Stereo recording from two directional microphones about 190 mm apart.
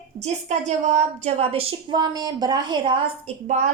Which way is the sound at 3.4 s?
40° right (ahead or behind).